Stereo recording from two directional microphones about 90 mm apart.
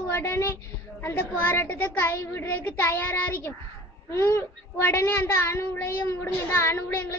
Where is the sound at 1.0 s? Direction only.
25° left (ahead or behind).